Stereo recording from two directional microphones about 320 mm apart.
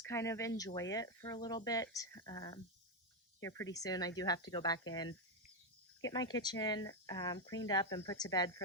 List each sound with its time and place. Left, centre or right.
0.0 s speech: centre
6.0 s speech: centre